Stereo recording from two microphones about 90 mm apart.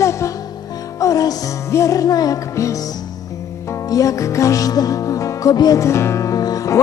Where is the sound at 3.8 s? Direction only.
40° left (ahead or behind).